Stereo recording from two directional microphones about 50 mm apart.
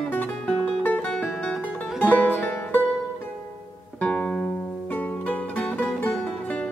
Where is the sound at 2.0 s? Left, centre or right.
Left.